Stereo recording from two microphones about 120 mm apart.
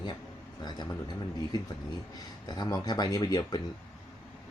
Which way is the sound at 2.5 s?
30° left (ahead or behind).